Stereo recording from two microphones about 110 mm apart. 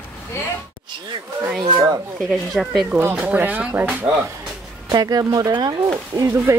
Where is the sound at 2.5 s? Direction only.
Centre (ahead or behind).